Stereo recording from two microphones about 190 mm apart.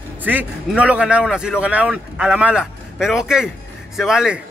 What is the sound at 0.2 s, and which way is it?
A man's voice, 10° right (ahead or behind).